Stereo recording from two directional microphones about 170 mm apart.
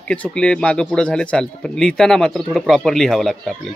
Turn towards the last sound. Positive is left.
turn(degrees=0)  # may be behind; listen again after turning